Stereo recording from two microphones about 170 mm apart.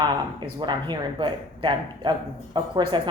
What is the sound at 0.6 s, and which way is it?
Speech, 25° right (ahead or behind).